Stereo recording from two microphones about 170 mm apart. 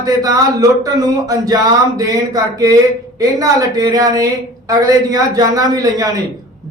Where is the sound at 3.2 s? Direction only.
20° right (ahead or behind).